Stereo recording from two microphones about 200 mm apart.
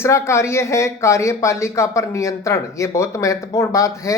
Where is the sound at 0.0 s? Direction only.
15° left (ahead or behind).